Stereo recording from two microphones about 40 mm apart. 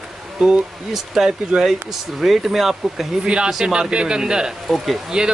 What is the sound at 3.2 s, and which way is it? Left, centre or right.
Speech, right.